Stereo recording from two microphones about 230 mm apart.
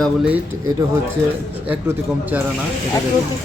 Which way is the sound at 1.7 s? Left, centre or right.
Centre.